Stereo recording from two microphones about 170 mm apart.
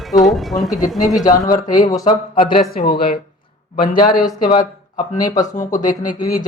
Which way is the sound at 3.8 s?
55° left (ahead or behind).